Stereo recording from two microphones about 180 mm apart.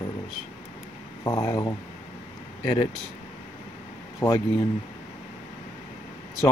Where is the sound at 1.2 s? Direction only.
20° left (ahead or behind).